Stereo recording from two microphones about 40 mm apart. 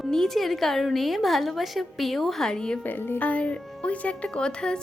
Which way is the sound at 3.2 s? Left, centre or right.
Left.